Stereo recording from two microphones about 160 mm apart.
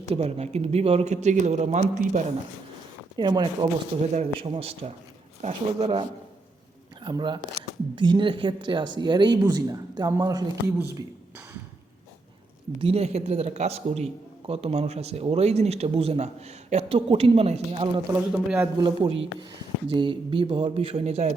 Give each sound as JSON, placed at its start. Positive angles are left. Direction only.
{"t": 0.1, "sound": "a man's voice", "side_deg": -40}
{"t": 3.2, "sound": "speech", "side_deg": -25}
{"t": 4.0, "sound": "a man's voice", "side_deg": -45}
{"t": 12.8, "sound": "a man's voice", "side_deg": -40}
{"t": 18.1, "sound": "a man's voice", "side_deg": -10}
{"t": 18.8, "sound": "a man's voice", "side_deg": -30}